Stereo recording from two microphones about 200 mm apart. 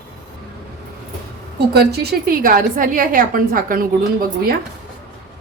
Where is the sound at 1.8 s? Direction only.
50° right (ahead or behind).